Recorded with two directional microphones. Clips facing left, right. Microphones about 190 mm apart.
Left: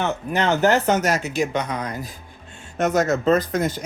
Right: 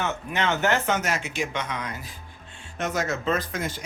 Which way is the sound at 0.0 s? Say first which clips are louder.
Left 5 dB; 35° left (ahead or behind).